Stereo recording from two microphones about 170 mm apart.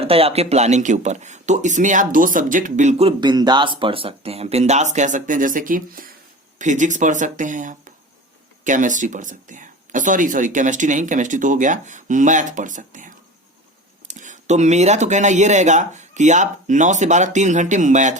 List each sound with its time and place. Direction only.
0.0 s speech: 35° right (ahead or behind)
14.1 s speech: 45° right (ahead or behind)